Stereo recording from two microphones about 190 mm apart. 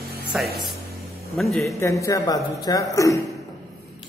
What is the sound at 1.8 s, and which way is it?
A woman's voice, 15° left (ahead or behind).